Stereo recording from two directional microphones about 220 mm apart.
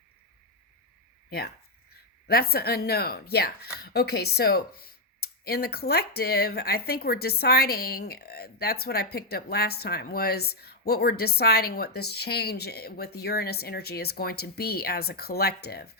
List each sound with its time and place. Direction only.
2.2 s a woman's voice: 45° left (ahead or behind)